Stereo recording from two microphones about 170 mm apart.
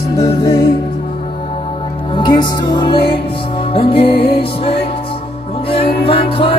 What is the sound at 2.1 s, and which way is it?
Music, 30° left (ahead or behind).